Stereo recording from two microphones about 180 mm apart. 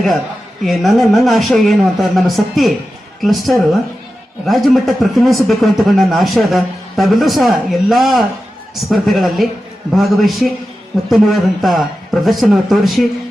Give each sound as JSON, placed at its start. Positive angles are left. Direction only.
{"t": 0.6, "sound": "speech", "side_deg": 0}